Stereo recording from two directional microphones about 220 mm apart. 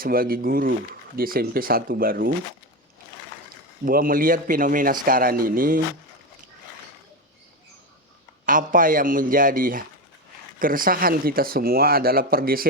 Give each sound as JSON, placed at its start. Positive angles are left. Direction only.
{"t": 0.0, "sound": "speech", "side_deg": -40}
{"t": 3.8, "sound": "speech", "side_deg": -40}
{"t": 8.4, "sound": "speech", "side_deg": -40}